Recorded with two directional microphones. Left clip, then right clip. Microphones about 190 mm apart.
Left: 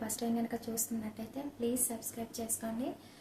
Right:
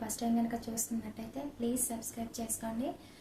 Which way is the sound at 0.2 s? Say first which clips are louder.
Right 2 dB; centre (ahead or behind).